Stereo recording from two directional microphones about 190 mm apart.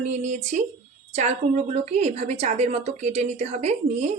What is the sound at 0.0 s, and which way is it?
A woman's voice, 40° right (ahead or behind).